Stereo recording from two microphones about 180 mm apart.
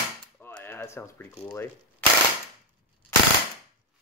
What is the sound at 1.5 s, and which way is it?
Speech, 10° left (ahead or behind).